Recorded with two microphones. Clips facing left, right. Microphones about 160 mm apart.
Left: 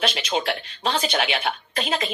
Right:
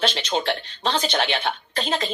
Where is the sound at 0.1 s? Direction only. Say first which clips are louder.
Right 1 dB; 5° left (ahead or behind).